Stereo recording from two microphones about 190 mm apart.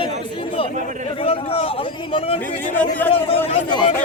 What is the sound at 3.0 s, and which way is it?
Speech, 10° left (ahead or behind).